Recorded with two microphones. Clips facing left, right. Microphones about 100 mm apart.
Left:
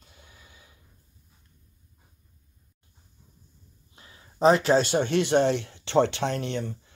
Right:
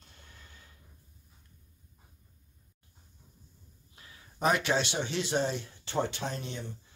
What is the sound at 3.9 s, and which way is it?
Speech, 25° left (ahead or behind).